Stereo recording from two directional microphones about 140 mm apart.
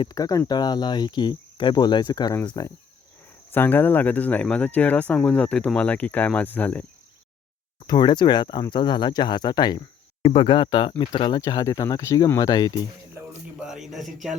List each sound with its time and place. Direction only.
0.0 s cricket: 25° left (ahead or behind)
3.5 s speech: 15° left (ahead or behind)
7.9 s cricket: 30° left (ahead or behind)
11.3 s speech: 25° left (ahead or behind)
13.6 s speech: 5° right (ahead or behind)